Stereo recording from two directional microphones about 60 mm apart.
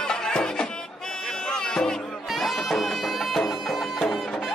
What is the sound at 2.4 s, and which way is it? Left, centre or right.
Bagpipes, centre.